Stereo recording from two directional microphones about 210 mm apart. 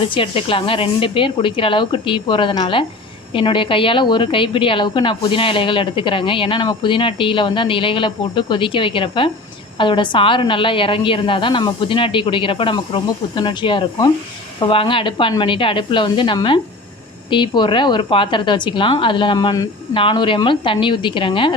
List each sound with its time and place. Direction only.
0.0 s a woman's voice: 25° left (ahead or behind)